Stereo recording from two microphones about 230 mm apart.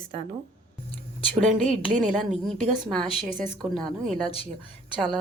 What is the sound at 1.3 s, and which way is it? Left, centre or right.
Speech, right.